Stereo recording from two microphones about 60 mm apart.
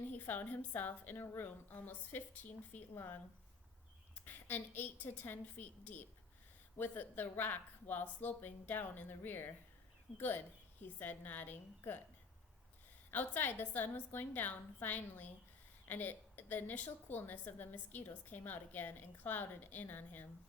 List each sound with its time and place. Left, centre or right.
0.2 s a woman's voice: left
1.1 s a woman's voice: left
2.9 s a woman's voice: left
13.1 s a woman's voice: left